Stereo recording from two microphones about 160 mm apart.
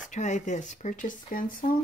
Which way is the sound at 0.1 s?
50° left (ahead or behind).